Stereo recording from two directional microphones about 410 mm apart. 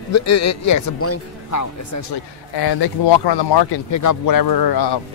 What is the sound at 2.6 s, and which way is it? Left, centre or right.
Speech, left.